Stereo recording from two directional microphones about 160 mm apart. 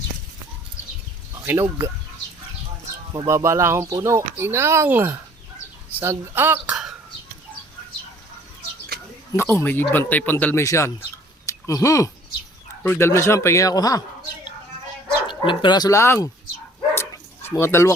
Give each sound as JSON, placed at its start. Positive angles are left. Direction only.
{"t": 1.4, "sound": "speech", "side_deg": -15}
{"t": 3.1, "sound": "speech", "side_deg": -20}
{"t": 9.3, "sound": "speech", "side_deg": 15}
{"t": 15.0, "sound": "speech", "side_deg": 30}
{"t": 16.9, "sound": "dog", "side_deg": 15}